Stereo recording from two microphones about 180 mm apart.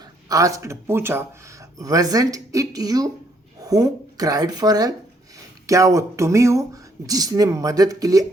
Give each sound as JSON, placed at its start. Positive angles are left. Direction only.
{"t": 0.3, "sound": "speech", "side_deg": -20}